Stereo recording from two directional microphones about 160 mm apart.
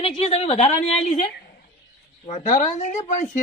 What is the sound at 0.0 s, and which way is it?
A woman's voice, 40° left (ahead or behind).